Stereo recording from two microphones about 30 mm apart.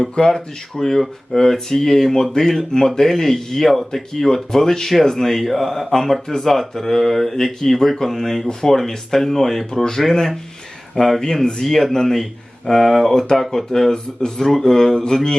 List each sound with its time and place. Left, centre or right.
0.3 s speech: centre
13.9 s speech: left
15.0 s mantra: left